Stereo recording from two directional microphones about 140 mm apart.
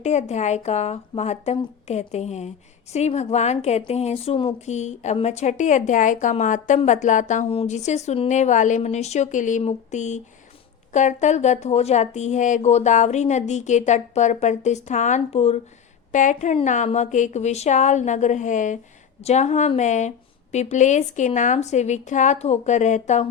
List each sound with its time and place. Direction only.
0.0 s speech: 55° left (ahead or behind)
4.6 s speech: 55° left (ahead or behind)
7.5 s speech: 50° left (ahead or behind)
16.1 s speech: 65° left (ahead or behind)